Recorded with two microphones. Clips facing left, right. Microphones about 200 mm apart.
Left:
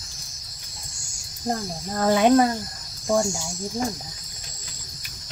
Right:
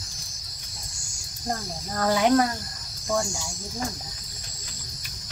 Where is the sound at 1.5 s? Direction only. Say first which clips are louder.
Left 4 dB; 20° left (ahead or behind).